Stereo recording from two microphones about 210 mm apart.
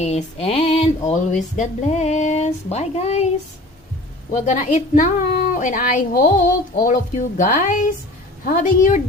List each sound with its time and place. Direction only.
0.0 s speech: 30° left (ahead or behind)
4.3 s speech: 35° left (ahead or behind)